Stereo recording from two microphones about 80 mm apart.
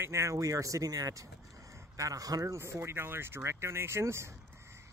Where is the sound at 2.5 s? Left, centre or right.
Right.